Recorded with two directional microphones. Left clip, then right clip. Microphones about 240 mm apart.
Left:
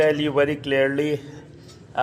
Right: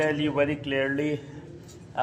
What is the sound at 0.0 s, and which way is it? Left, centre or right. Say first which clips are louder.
A man's voice: left 6 dB; left.